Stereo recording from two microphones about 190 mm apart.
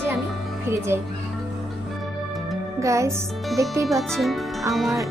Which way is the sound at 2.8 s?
15° right (ahead or behind).